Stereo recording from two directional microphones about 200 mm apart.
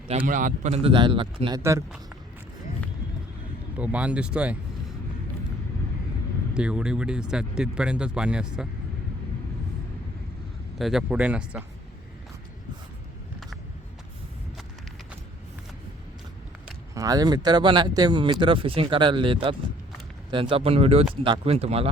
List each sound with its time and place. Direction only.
0.1 s speech: 40° right (ahead or behind); by 1.8 s 15° right (ahead or behind)
3.8 s speech: 5° right (ahead or behind)
6.5 s speech: 5° right (ahead or behind)
10.8 s speech: centre (ahead or behind)
16.9 s speech: 15° right (ahead or behind)